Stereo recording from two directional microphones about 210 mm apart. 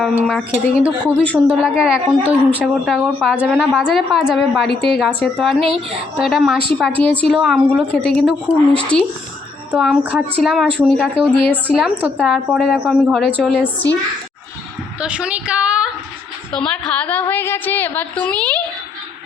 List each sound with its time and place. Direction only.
0.0 s a woman's voice: centre (ahead or behind)
5.6 s a woman's voice: 25° right (ahead or behind)
6.1 s a woman's voice: centre (ahead or behind)
15.0 s a woman's voice: 5° right (ahead or behind)